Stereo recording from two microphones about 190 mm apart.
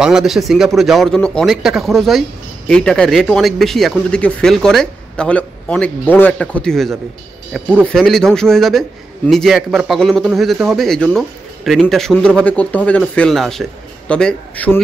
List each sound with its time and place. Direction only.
0.0 s speech: 5° right (ahead or behind)